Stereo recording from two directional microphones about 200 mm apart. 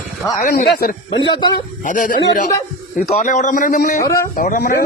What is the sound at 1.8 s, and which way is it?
A man's voice, 40° left (ahead or behind).